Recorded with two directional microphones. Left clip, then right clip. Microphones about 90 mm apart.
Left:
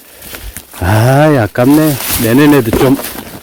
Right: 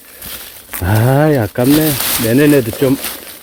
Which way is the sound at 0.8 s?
65° left (ahead or behind).